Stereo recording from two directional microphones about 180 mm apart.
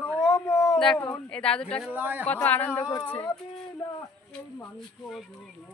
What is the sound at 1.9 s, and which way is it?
Speech, 10° right (ahead or behind).